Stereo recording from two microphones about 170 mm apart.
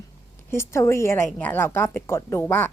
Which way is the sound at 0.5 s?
15° left (ahead or behind).